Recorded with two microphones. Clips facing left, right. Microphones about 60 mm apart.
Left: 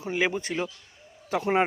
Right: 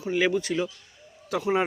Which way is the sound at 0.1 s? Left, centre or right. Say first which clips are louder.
Right 3 dB; centre.